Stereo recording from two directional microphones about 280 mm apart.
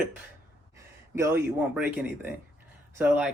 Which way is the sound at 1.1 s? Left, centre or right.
Centre.